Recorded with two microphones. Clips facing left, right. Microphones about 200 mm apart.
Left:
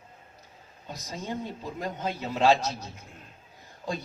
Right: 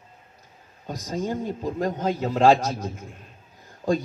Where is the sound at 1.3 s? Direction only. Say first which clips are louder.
Right 3 dB; 45° right (ahead or behind).